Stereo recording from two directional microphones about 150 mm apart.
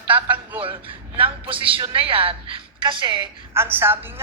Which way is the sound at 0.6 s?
35° right (ahead or behind).